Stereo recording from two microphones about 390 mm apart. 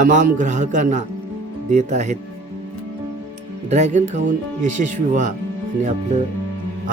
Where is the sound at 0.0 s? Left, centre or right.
Centre.